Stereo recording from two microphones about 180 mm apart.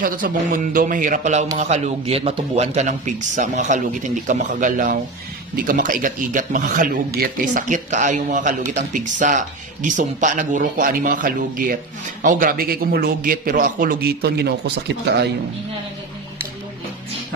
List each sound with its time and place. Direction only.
0.0 s a man's voice: 50° right (ahead or behind); by 15.3 s 70° right (ahead or behind)